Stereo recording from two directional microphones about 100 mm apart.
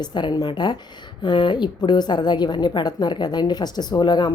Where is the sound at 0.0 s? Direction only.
50° left (ahead or behind).